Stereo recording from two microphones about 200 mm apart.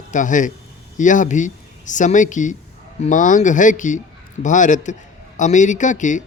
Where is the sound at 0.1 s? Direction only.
40° left (ahead or behind).